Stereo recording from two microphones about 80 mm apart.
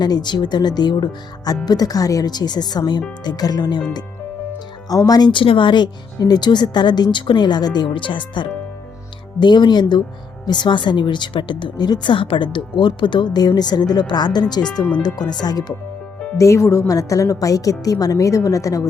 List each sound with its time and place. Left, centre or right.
0.0 s speech: left
4.9 s a woman's voice: left
5.3 s speech: left
6.1 s speech: left
9.4 s speech: left
16.4 s a woman's voice: left